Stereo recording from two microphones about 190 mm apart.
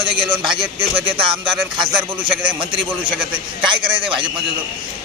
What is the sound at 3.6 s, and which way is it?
Speech, 25° right (ahead or behind).